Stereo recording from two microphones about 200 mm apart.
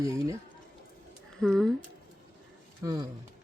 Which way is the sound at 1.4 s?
Centre (ahead or behind).